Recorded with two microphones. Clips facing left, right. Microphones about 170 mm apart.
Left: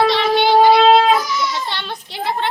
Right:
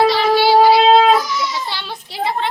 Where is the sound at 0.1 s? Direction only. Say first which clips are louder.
Right 1 dB; 5° right (ahead or behind).